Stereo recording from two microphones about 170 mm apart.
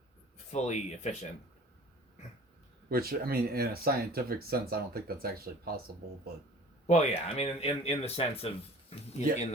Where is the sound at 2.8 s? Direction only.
60° right (ahead or behind).